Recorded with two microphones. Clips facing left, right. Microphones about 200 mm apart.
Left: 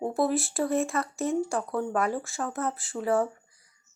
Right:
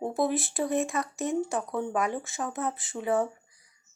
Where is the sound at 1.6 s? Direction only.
Centre (ahead or behind).